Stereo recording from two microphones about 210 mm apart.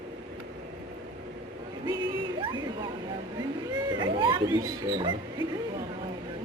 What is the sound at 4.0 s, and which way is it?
Speech, 25° right (ahead or behind).